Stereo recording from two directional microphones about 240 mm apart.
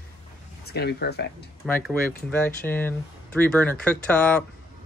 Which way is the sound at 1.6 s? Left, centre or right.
Centre.